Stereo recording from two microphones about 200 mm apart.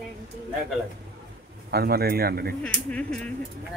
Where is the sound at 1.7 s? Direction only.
50° right (ahead or behind).